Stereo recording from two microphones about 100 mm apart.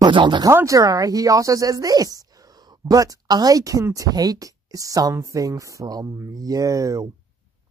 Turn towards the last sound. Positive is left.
turn(degrees=-35)  # may be behind; listen again after turning